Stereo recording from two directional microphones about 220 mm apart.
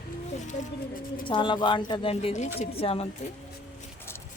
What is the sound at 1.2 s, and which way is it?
Speech, 20° left (ahead or behind).